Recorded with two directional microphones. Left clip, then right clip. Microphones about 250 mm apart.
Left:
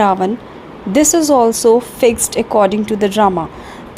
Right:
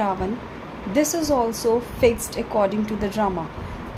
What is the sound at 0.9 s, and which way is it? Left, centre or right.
Speech, left.